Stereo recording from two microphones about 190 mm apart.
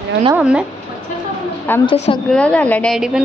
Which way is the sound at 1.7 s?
10° left (ahead or behind).